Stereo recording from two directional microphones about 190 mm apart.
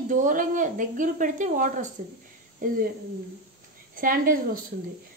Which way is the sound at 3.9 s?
45° right (ahead or behind).